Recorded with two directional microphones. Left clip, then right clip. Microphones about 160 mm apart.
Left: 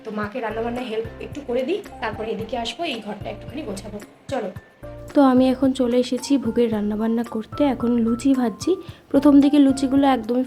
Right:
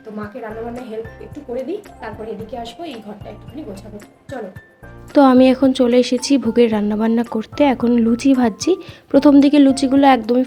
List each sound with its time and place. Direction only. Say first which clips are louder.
0.2 s a woman's voice: left 3 dB; centre (ahead or behind)
5.1 s a woman's voice: right 6 dB; 35° right (ahead or behind)